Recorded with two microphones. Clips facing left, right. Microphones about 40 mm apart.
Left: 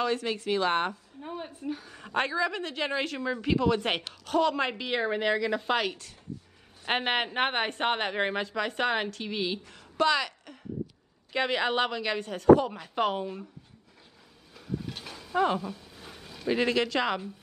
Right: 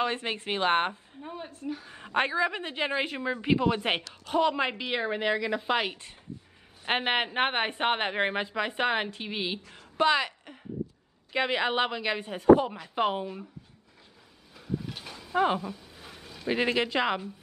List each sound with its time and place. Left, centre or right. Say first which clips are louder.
0.0 s a woman's voice: left 1 dB; right
1.2 s a woman's voice: left 1 dB; centre
1.9 s a woman's voice: right 2 dB; right
12.7 s a woman's voice: even; centre
14.5 s a sound: right 1 dB; centre
15.3 s speech: right 1 dB; centre
15.7 s a sound: even; centre
16.4 s speech: left 1 dB; centre